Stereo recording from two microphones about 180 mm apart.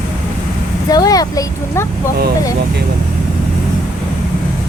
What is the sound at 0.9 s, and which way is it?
Speech, 20° left (ahead or behind).